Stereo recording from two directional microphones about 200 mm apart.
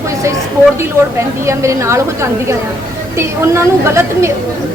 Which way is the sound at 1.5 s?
15° right (ahead or behind).